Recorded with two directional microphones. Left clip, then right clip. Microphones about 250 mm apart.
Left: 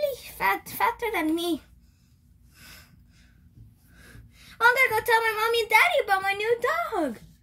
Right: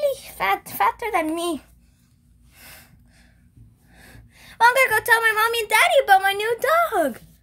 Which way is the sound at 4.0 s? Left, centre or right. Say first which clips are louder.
Right 4 dB; right.